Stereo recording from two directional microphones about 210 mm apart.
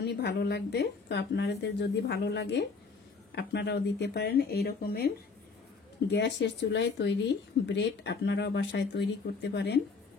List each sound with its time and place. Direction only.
0.0 s a woman's voice: 55° left (ahead or behind)